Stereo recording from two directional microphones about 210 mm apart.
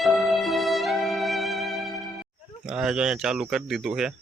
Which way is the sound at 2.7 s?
5° right (ahead or behind).